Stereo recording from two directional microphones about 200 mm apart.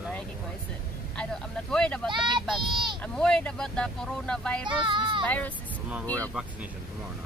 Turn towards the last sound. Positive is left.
turn(degrees=5)  # may be behind; listen again after turning